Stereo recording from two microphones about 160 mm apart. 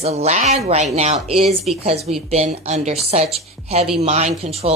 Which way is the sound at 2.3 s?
45° right (ahead or behind).